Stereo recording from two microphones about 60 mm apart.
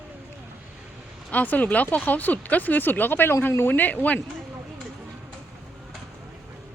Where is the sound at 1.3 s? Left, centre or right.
Left.